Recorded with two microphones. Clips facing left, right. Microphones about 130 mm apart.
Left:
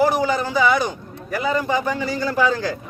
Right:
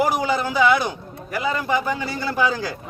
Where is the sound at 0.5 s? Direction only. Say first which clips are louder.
Right 2 dB; 5° right (ahead or behind).